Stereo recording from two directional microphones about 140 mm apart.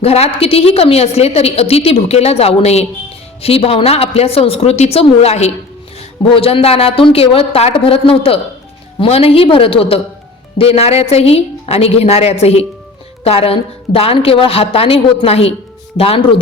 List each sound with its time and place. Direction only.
0.0 s a woman's voice: 45° left (ahead or behind)